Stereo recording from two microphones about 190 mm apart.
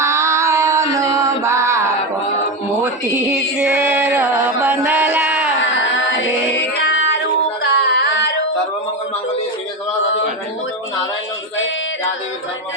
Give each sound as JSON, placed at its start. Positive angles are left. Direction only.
{"t": 0.0, "sound": "a sound", "side_deg": -15}
{"t": 2.8, "sound": "music", "side_deg": -5}
{"t": 5.7, "sound": "music", "side_deg": 75}
{"t": 7.6, "sound": "singing", "side_deg": 65}